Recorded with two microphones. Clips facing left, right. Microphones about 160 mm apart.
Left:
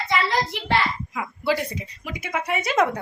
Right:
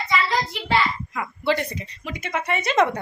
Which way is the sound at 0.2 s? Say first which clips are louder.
Left 1 dB; 55° left (ahead or behind).